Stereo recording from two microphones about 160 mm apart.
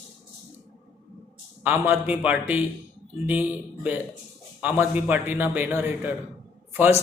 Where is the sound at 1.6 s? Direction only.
10° right (ahead or behind).